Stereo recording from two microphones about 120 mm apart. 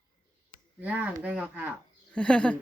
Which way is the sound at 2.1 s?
10° left (ahead or behind).